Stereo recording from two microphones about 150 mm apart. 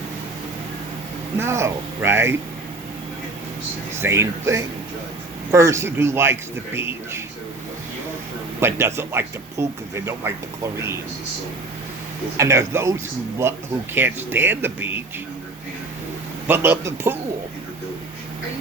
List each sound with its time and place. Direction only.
1.4 s speech: 15° right (ahead or behind)
3.9 s speech: 15° right (ahead or behind)
8.6 s speech: 15° right (ahead or behind)
12.4 s speech: 20° right (ahead or behind)
16.5 s speech: 15° right (ahead or behind)